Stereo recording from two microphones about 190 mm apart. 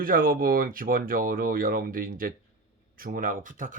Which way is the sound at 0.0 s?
50° right (ahead or behind).